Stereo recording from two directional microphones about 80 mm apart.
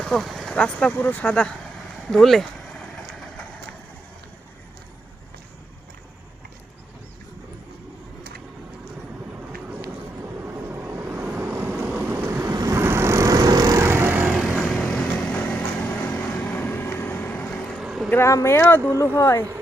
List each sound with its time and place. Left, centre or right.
0.0 s vehicle: centre
0.5 s speech: centre
2.0 s vehicle: centre
10.4 s vehicle: right
12.3 s vehicle: right
13.8 s vehicle: right
14.3 s vehicle: centre
14.8 s vehicle: centre
17.5 s a sound: centre
18.3 s speech: left